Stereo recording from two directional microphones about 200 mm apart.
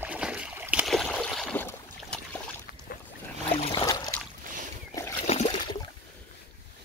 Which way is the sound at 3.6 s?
25° left (ahead or behind).